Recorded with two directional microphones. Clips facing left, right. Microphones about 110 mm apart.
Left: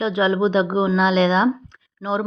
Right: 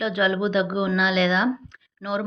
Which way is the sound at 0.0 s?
30° left (ahead or behind).